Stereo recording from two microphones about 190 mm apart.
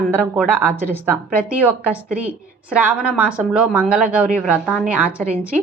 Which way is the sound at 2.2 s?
5° right (ahead or behind).